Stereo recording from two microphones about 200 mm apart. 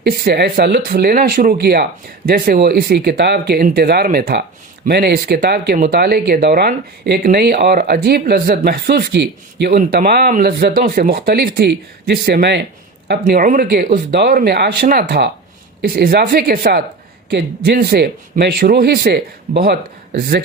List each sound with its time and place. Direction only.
0.0 s speech: 50° right (ahead or behind)
13.1 s speech: 45° right (ahead or behind)